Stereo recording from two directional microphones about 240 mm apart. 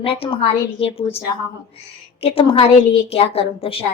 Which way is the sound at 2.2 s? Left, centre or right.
Left.